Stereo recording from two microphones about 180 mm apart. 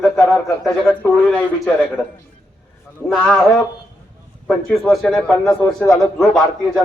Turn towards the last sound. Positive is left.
turn(degrees=0)  # may be behind; listen again after turning